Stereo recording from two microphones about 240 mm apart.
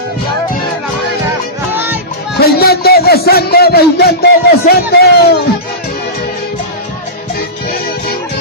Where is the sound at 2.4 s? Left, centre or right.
Left.